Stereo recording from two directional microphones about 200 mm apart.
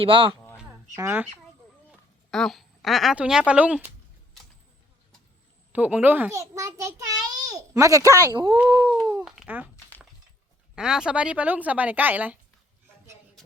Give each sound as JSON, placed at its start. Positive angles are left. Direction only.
{"t": 0.0, "sound": "speech", "side_deg": -25}
{"t": 0.9, "sound": "speech", "side_deg": -10}
{"t": 1.9, "sound": "a woman's voice", "side_deg": 0}
{"t": 5.7, "sound": "a child's voice", "side_deg": -10}
{"t": 9.0, "sound": "speech", "side_deg": -5}
{"t": 10.8, "sound": "speech", "side_deg": -5}